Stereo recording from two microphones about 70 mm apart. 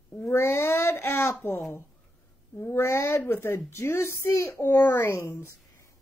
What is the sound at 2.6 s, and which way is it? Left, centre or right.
A woman's voice, left.